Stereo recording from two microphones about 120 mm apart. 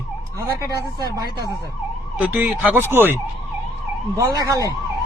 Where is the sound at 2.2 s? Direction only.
15° right (ahead or behind).